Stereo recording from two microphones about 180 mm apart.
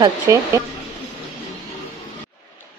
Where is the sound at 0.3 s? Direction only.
15° right (ahead or behind).